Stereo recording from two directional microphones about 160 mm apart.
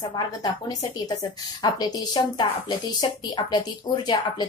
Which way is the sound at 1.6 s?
25° left (ahead or behind).